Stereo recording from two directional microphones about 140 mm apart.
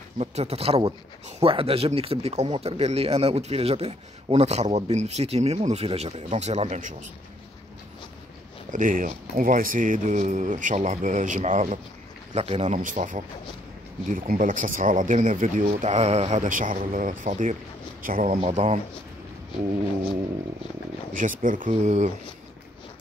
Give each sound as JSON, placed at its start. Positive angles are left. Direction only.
{"t": 0.2, "sound": "speech", "side_deg": -45}
{"t": 8.7, "sound": "speech", "side_deg": -70}
{"t": 12.4, "sound": "speech", "side_deg": -50}
{"t": 12.7, "sound": "speech", "side_deg": -70}
{"t": 14.0, "sound": "speech", "side_deg": -80}
{"t": 15.7, "sound": "speech", "side_deg": -55}
{"t": 18.0, "sound": "speech", "side_deg": -85}
{"t": 18.5, "sound": "speech", "side_deg": -50}
{"t": 21.1, "sound": "speech", "side_deg": -70}